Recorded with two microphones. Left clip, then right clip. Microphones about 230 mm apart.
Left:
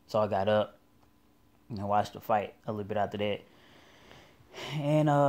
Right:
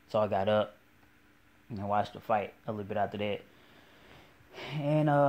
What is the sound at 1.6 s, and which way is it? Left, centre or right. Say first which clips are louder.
Speech: left 2 dB; left.